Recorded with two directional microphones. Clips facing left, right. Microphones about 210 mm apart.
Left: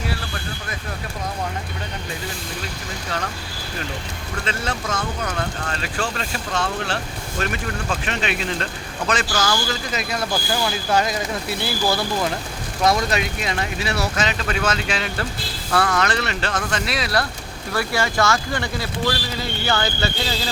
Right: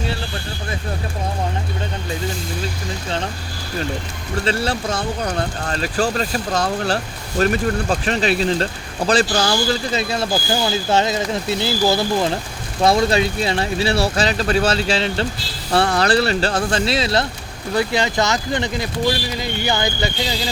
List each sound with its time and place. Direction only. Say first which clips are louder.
4.4 s speech: right 6 dB; 35° right (ahead or behind); by 20.1 s 15° right (ahead or behind)